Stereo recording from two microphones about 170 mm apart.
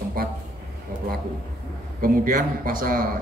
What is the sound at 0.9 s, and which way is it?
A man's voice, 55° right (ahead or behind).